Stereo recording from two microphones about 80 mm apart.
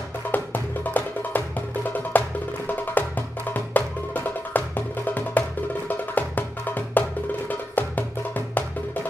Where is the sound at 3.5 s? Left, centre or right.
Left.